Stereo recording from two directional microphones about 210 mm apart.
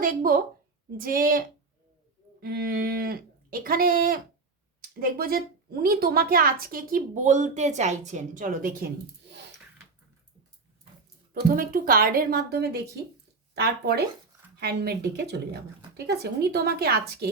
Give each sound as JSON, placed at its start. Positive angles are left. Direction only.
{"t": 0.0, "sound": "a woman's voice", "side_deg": -40}
{"t": 11.4, "sound": "speech", "side_deg": -45}
{"t": 14.5, "sound": "speech", "side_deg": -50}